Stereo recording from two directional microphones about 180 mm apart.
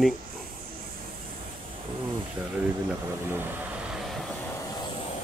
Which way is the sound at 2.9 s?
10° right (ahead or behind).